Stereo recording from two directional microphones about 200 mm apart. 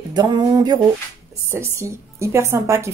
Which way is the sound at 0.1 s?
20° right (ahead or behind).